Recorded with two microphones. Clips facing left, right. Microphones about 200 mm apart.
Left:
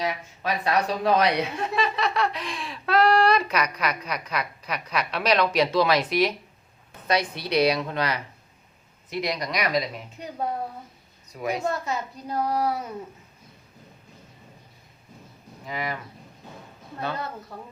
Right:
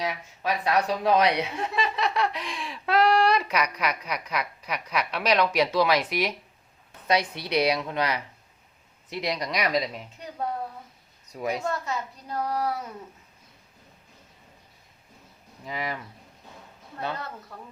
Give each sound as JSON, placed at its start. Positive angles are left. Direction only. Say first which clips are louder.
{"t": 0.0, "sound": "a woman's voice", "louder": "left 1 dB", "side_deg": -10}
{"t": 9.0, "sound": "speech", "louder": "left 1 dB", "side_deg": -30}
{"t": 11.9, "sound": "child singing", "louder": "left 2 dB", "side_deg": 10}
{"t": 15.6, "sound": "speech", "louder": "left 1 dB", "side_deg": -30}